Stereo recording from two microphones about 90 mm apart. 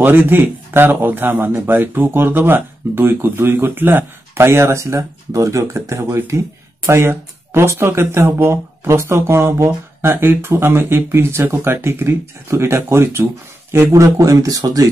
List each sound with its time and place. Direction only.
0.0 s speech: 20° right (ahead or behind); by 14.9 s 45° right (ahead or behind)